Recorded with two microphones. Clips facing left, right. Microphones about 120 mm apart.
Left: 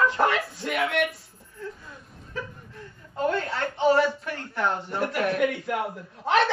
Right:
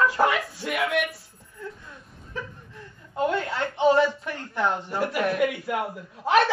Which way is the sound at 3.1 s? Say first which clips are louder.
Right 1 dB; 15° right (ahead or behind).